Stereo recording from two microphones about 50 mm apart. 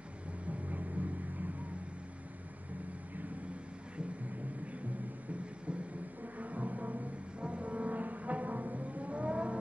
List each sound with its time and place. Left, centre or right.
0.5 s music: right
6.4 s music: right